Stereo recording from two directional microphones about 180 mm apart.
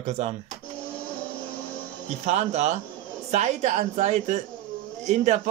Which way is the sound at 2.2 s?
40° right (ahead or behind).